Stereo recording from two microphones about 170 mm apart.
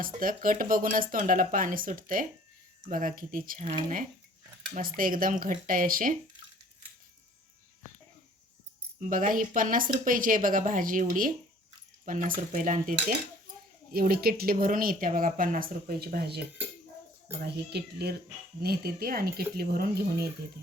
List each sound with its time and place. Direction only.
0.0 s speech: 55° right (ahead or behind)
3.6 s speech: 45° right (ahead or behind)
4.7 s speech: 55° right (ahead or behind)
9.0 s speech: 50° right (ahead or behind)
13.9 s speech: 60° right (ahead or behind)
17.4 s speech: 75° right (ahead or behind)